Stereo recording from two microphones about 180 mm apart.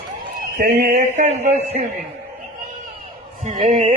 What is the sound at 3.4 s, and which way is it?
Speech, 40° right (ahead or behind).